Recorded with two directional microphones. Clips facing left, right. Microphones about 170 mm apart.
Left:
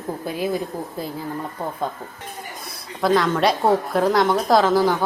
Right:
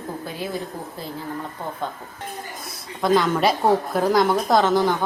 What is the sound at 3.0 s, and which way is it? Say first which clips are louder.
A woman's voice: even; centre (ahead or behind).